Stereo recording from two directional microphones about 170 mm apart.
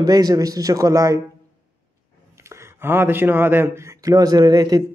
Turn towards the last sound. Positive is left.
turn(degrees=-20)  # may be behind; listen again after turning